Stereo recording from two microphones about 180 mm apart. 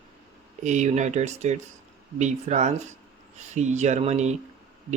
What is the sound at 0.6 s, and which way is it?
Speech, 40° right (ahead or behind).